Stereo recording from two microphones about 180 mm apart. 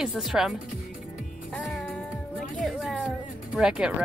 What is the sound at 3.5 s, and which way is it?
Speech, 5° right (ahead or behind).